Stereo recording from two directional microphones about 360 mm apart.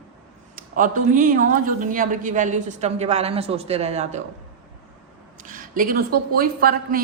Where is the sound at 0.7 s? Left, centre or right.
Right.